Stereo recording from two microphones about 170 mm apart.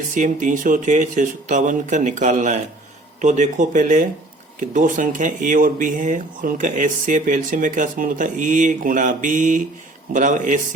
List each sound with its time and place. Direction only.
0.1 s speech: 50° right (ahead or behind)